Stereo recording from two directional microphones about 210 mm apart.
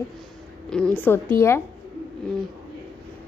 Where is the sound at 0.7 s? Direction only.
5° left (ahead or behind).